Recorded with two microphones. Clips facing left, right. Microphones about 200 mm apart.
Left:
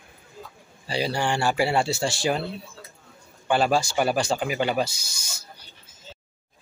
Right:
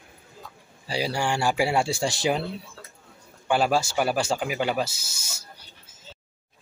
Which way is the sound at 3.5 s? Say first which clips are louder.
Left 1 dB; 5° right (ahead or behind).